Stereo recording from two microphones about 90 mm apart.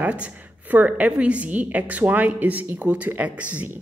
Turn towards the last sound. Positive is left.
turn(degrees=-15)  # may be behind; listen again after turning